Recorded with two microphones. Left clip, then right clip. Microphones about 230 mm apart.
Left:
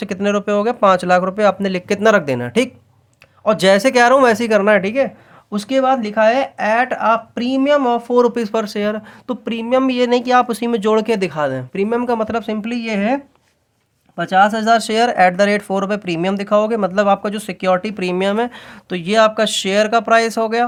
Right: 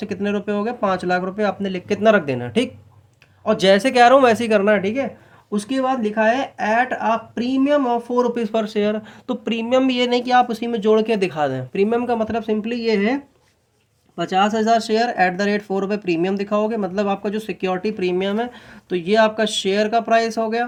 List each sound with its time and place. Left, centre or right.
0.0 s speech: left